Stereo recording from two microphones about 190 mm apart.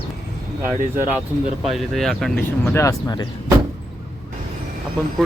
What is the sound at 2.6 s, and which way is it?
Speech, 15° left (ahead or behind).